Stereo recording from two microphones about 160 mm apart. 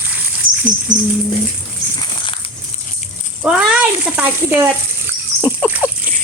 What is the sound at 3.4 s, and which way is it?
Speech, 5° right (ahead or behind).